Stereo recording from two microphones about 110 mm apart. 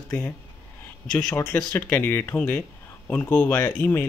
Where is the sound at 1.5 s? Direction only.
10° left (ahead or behind).